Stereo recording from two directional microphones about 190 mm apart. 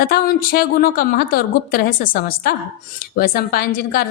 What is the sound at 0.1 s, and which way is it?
A woman's voice, 50° left (ahead or behind).